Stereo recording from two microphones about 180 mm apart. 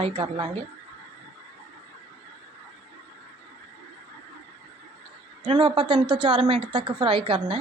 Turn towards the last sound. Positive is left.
turn(degrees=-30)  # may be behind; listen again after turning